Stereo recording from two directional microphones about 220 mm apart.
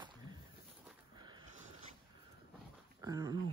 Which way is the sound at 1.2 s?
20° right (ahead or behind).